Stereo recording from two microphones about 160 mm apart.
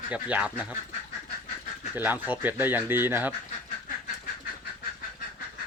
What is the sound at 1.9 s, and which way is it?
Speech, 10° right (ahead or behind).